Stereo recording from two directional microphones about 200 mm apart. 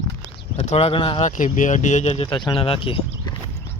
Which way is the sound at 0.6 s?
35° left (ahead or behind).